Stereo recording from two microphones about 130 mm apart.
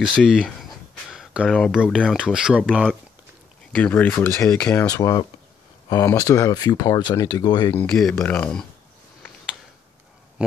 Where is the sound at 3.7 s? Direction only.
10° left (ahead or behind); by 7.7 s 30° left (ahead or behind).